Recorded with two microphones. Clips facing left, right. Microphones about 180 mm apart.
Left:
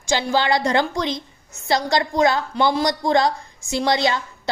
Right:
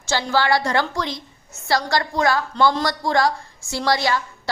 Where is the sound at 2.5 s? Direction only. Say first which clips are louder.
Even; 10° left (ahead or behind).